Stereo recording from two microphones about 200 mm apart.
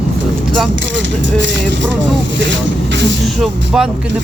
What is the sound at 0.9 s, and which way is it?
Speech, 65° right (ahead or behind).